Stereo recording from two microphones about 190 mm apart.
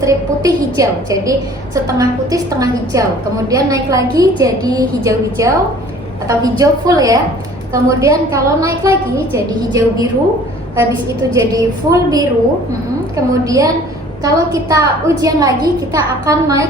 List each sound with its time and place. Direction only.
0.0 s a woman's voice: 20° right (ahead or behind)
11.3 s a woman's voice: 20° right (ahead or behind)